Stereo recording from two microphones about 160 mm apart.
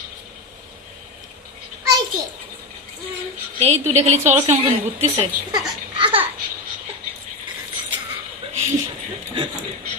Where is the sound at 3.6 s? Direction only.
40° right (ahead or behind).